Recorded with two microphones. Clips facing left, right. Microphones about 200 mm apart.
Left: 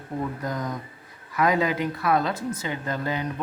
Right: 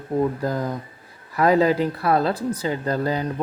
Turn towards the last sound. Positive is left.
turn(degrees=-35)  # may be behind; listen again after turning